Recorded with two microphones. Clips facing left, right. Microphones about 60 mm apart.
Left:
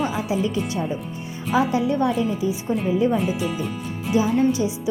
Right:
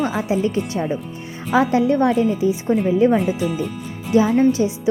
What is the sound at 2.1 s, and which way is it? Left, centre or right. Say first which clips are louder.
Speech: right 5 dB; right.